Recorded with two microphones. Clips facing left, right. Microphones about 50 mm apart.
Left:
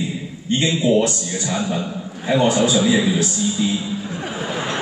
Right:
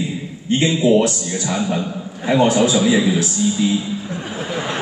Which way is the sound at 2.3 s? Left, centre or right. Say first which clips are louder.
Right 2 dB; right.